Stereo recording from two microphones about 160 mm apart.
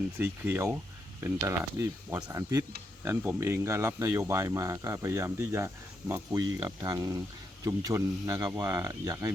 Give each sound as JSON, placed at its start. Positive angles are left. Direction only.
{"t": 0.2, "sound": "speech", "side_deg": -15}
{"t": 2.3, "sound": "speech", "side_deg": -25}